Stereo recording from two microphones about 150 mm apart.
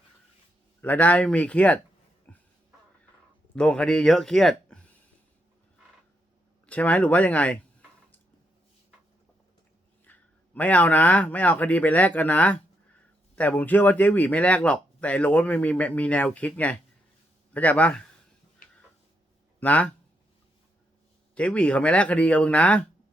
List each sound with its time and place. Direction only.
0.8 s speech: 10° left (ahead or behind)
2.3 s music: 10° left (ahead or behind)
3.5 s speech: 5° left (ahead or behind)
6.7 s speech: 10° left (ahead or behind)
10.0 s speech: 10° left (ahead or behind)
18.6 s tick-tock: 65° left (ahead or behind)
19.5 s speech: 10° left (ahead or behind)
21.3 s speech: 10° left (ahead or behind)